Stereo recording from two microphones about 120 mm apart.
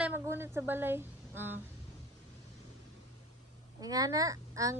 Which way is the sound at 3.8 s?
30° right (ahead or behind).